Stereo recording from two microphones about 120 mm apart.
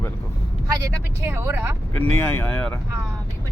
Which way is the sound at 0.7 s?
25° right (ahead or behind).